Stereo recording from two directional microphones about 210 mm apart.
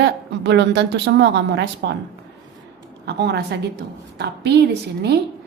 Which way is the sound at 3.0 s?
50° right (ahead or behind).